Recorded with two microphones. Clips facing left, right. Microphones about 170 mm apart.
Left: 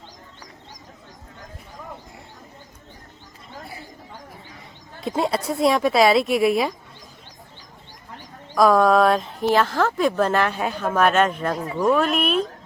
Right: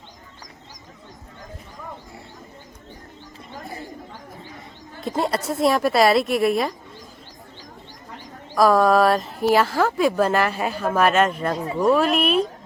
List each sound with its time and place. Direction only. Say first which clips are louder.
4.9 s speech: left 1 dB; centre (ahead or behind)
8.5 s speech: even; centre (ahead or behind)
11.5 s speech: right 1 dB; 25° right (ahead or behind)
11.8 s speech: right 1 dB; centre (ahead or behind)